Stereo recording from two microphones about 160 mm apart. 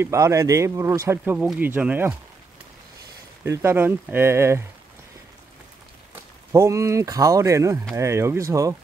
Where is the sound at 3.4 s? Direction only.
15° right (ahead or behind).